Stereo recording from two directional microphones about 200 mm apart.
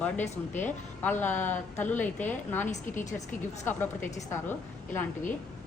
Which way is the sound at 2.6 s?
35° left (ahead or behind).